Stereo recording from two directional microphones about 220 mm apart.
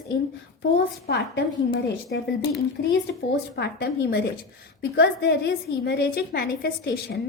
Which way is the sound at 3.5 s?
50° left (ahead or behind).